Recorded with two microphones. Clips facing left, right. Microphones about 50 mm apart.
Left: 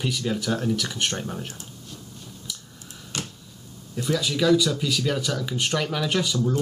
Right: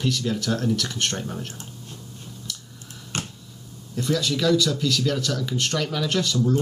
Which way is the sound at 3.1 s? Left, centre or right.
Right.